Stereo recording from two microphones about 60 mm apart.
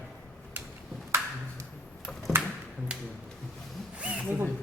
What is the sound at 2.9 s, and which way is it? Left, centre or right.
Music, centre.